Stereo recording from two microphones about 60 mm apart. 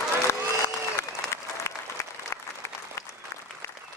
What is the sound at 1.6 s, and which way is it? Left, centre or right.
Applause, left.